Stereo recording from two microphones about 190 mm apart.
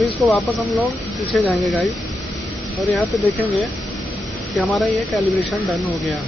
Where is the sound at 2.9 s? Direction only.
5° left (ahead or behind).